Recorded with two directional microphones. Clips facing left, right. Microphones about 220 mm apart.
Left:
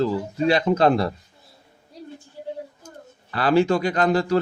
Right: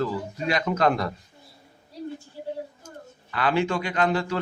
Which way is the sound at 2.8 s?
35° left (ahead or behind).